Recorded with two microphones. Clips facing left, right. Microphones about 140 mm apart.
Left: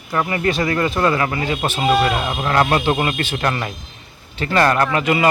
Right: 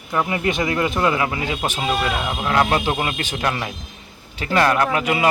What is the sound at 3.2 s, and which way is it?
Speech, 15° right (ahead or behind).